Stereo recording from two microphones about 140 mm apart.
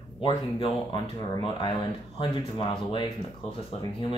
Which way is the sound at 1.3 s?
35° left (ahead or behind).